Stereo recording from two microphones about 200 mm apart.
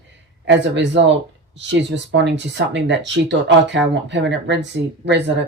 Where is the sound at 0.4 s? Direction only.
65° right (ahead or behind).